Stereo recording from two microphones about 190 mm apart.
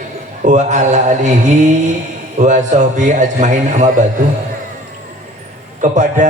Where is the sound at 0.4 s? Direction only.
40° right (ahead or behind).